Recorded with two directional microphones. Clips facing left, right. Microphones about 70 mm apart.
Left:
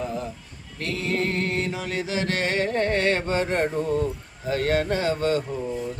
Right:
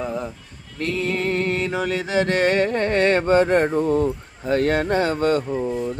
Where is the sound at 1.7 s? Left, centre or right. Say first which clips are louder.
Right 6 dB; right.